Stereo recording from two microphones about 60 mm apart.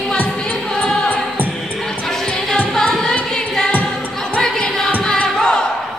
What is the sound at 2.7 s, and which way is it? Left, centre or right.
Music, centre.